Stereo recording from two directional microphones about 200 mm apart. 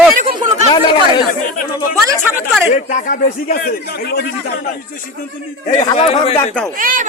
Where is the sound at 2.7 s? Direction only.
40° left (ahead or behind).